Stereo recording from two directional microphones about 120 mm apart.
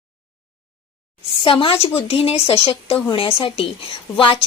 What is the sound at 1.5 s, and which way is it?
A woman's voice, 45° left (ahead or behind).